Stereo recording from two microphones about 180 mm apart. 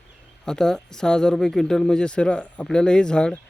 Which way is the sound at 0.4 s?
5° left (ahead or behind).